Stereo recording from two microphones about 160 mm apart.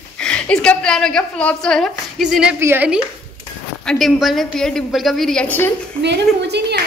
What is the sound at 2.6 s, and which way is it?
Speech, 15° right (ahead or behind).